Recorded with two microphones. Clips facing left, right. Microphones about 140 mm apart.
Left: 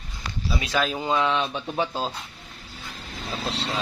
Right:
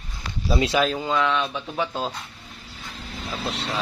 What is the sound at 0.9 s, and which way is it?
Speech, 20° left (ahead or behind).